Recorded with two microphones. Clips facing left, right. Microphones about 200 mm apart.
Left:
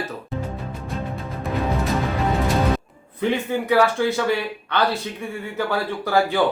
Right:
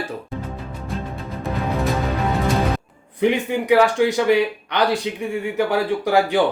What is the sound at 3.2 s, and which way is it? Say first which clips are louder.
Speech: right 3 dB; 15° right (ahead or behind).